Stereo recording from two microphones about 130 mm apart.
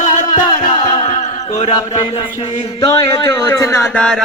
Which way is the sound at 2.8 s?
30° left (ahead or behind).